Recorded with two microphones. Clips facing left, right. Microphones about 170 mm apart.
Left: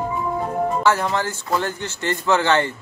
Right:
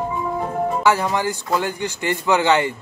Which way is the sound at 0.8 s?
10° right (ahead or behind).